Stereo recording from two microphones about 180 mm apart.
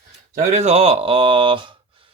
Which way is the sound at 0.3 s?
40° right (ahead or behind).